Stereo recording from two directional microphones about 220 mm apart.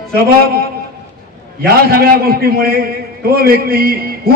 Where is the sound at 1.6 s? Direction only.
45° right (ahead or behind).